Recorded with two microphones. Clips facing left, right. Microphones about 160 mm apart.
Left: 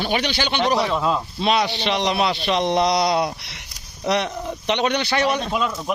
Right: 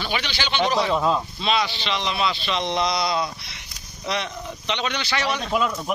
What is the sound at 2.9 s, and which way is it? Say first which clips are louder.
Speech: left 5 dB; 75° left (ahead or behind).